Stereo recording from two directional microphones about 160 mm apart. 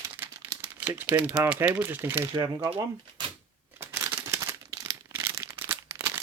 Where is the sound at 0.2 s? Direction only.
10° right (ahead or behind).